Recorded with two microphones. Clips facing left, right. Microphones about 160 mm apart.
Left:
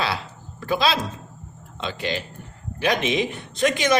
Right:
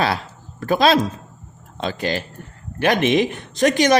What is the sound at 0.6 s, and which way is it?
A man's voice, 50° right (ahead or behind).